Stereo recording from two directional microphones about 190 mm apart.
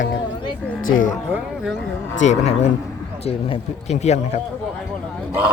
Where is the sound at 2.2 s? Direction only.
35° left (ahead or behind).